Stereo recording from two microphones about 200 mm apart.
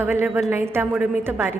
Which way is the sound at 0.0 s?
10° right (ahead or behind).